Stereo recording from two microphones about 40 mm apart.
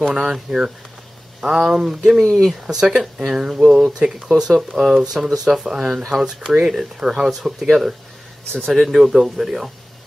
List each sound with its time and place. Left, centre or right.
0.0 s speech: centre
8.9 s speech: centre